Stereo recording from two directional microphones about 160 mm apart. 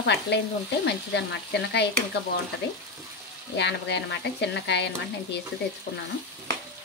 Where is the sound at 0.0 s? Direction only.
90° left.